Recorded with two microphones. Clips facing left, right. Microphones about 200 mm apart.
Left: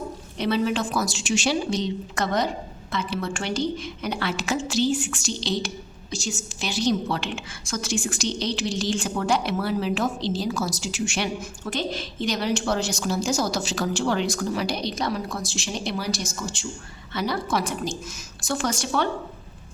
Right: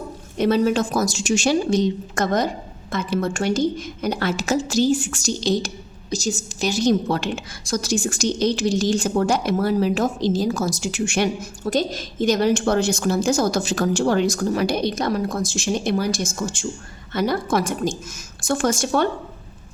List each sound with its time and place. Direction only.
0.3 s a woman's voice: 45° right (ahead or behind)